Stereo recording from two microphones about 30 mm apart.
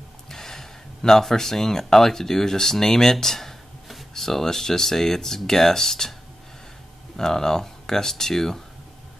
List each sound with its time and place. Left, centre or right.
0.3 s speech: centre
7.2 s speech: centre